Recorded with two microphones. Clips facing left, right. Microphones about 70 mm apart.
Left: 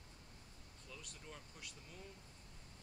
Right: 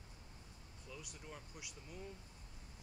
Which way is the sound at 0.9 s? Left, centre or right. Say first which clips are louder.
Right 3 dB; centre.